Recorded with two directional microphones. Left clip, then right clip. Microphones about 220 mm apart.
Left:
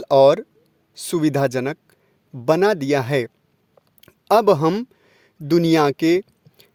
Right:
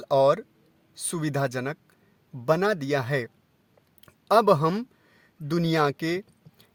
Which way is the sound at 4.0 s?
30° left (ahead or behind).